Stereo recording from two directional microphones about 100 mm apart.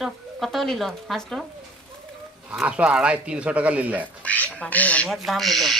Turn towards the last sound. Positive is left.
turn(degrees=0)  # may be behind; listen again after turning